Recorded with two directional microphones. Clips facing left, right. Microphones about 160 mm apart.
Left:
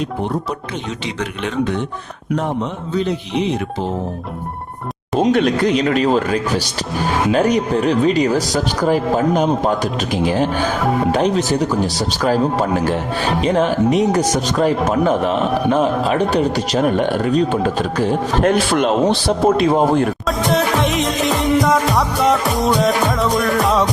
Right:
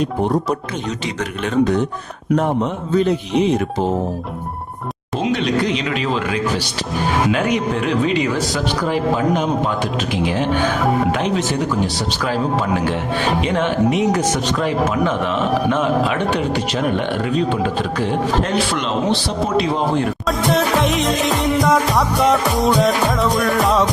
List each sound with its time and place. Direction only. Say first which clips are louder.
1.2 s a man's voice: right 3 dB; 40° right (ahead or behind)
2.9 s speech: right 3 dB; 50° right (ahead or behind)
5.2 s a man's voice: left 4 dB; 50° left (ahead or behind)
13.4 s a man's voice: left 5 dB; 35° left (ahead or behind)
20.2 s music: even; centre (ahead or behind)